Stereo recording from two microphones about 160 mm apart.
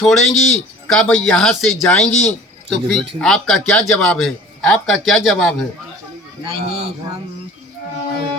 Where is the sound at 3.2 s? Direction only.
5° left (ahead or behind).